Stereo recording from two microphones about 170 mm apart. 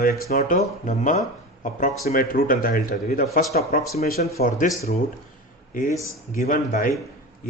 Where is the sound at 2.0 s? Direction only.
60° left (ahead or behind).